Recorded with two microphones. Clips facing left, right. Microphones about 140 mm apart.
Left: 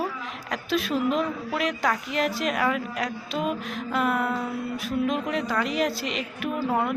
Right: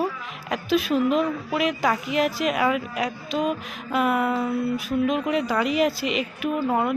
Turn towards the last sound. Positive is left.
turn(degrees=0)  # may be behind; listen again after turning